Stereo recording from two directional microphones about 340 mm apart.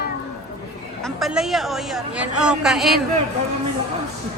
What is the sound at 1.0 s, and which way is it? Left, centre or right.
Speech, centre.